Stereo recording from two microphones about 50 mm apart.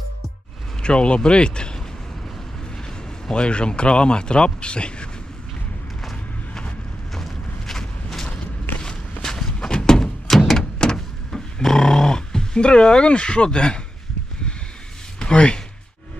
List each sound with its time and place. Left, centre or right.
0.8 s speech: left
3.3 s speech: centre
7.2 s a sound: centre
15.1 s speech: centre